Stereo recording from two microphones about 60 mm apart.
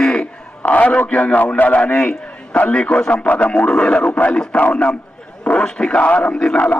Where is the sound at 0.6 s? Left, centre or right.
Left.